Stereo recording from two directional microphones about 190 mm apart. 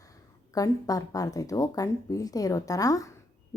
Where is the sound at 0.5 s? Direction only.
20° left (ahead or behind).